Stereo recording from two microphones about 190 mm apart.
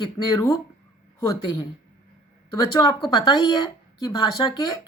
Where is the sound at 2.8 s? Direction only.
25° left (ahead or behind).